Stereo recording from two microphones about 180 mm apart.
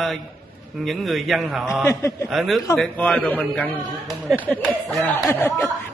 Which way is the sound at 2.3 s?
Centre (ahead or behind).